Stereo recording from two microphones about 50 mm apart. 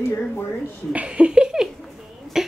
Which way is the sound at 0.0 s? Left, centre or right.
Left.